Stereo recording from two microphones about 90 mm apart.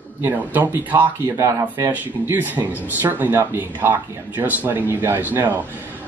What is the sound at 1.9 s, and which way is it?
Speech, 20° right (ahead or behind).